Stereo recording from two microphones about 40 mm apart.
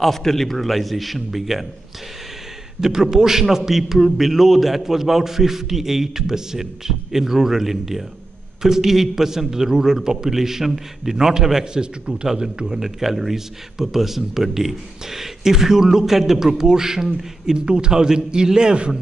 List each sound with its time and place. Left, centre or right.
0.0 s a man's voice: centre
2.8 s a man's voice: centre
11.6 s a man's voice: right
12.8 s a man's voice: centre; by 18.9 s right